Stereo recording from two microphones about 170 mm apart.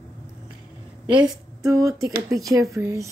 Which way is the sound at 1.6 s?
20° right (ahead or behind).